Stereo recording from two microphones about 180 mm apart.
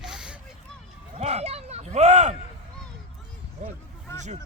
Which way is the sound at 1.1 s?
35° right (ahead or behind).